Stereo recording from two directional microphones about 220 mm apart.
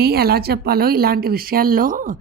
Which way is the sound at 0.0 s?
45° right (ahead or behind).